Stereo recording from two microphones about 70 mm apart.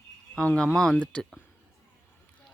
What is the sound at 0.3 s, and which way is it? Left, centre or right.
Speech, centre.